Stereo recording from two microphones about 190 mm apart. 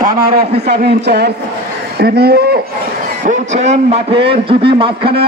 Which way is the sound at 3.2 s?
40° right (ahead or behind).